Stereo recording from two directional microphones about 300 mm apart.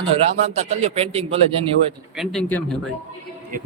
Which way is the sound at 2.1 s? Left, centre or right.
Centre.